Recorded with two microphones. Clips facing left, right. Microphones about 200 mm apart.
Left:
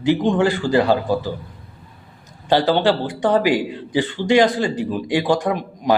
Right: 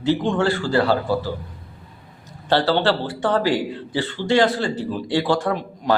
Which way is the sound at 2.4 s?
15° left (ahead or behind).